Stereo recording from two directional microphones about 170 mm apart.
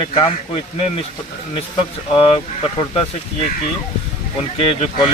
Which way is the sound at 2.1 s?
30° left (ahead or behind).